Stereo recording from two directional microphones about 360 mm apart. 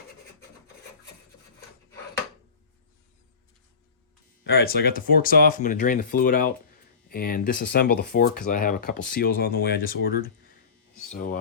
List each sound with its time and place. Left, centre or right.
4.4 s speech: left